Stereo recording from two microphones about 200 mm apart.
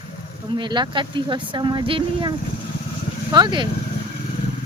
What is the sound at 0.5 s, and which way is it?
Speech, 20° right (ahead or behind).